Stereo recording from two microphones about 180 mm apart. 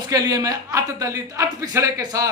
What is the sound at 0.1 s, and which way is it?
Speech, 20° right (ahead or behind).